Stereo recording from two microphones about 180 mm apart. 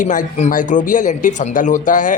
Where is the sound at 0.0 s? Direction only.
45° left (ahead or behind).